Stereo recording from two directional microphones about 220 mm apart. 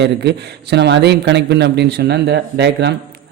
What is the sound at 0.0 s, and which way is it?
Speech, 50° right (ahead or behind).